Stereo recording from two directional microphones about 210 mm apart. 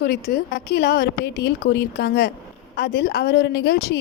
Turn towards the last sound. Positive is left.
turn(degrees=55)  # may be behind; listen again after turning